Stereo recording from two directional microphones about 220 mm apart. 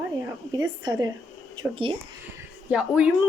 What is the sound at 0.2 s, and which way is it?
A woman's voice, 15° right (ahead or behind).